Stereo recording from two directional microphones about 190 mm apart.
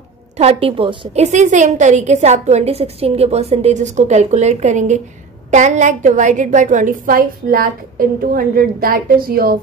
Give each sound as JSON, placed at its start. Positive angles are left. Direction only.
{"t": 0.4, "sound": "a woman's voice", "side_deg": -30}